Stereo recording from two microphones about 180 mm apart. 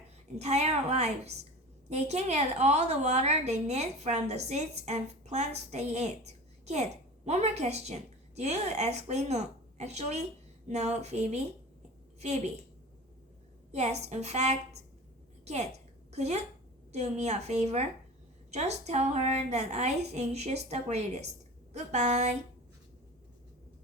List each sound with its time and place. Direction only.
0.3 s a woman's voice: 35° right (ahead or behind)
13.7 s a woman's voice: 40° right (ahead or behind)
15.4 s a sound: 40° right (ahead or behind)
16.9 s a woman's voice: 40° right (ahead or behind)